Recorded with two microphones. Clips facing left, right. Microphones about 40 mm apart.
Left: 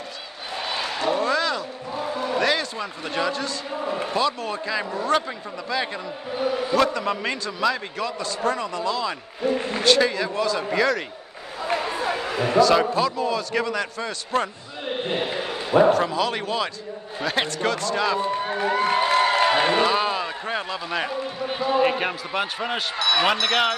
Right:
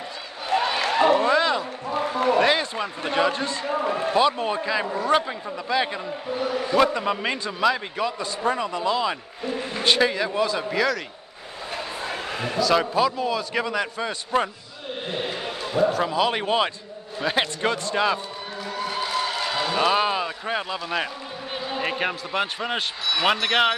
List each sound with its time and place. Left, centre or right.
0.8 s a sound: right
1.2 s a sound: right
2.0 s basketball bounce: right
2.4 s a man's voice: centre
6.3 s a man's voice: centre
6.7 s a man's voice: centre
10.6 s a man's voice: centre
11.6 s a sound: left
12.5 s a man's voice: centre
15.9 s a man's voice: centre
16.3 s a man's voice: right
17.2 s a man's voice: centre
18.4 s a sound: left
19.9 s a man's voice: centre